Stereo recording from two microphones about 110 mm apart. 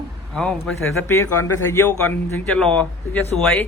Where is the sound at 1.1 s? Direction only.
25° left (ahead or behind).